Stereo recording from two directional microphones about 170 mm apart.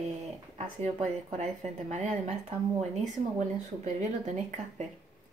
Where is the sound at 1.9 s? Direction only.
45° right (ahead or behind).